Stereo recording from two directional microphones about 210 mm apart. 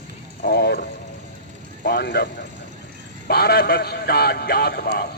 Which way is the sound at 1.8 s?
50° left (ahead or behind).